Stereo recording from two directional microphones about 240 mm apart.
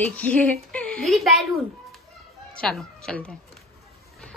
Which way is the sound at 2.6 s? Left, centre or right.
Centre.